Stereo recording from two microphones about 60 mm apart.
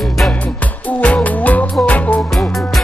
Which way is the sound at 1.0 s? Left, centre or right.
Left.